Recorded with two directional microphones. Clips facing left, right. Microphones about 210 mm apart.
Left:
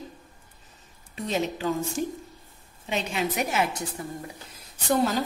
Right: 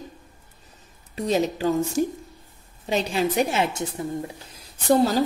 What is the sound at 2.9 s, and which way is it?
Speech, 35° right (ahead or behind).